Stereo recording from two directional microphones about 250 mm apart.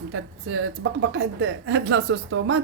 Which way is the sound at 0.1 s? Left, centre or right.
Right.